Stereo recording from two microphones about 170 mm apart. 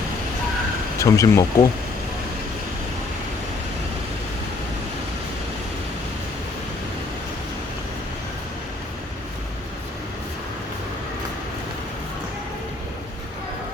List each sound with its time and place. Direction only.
0.9 s speech: 20° left (ahead or behind)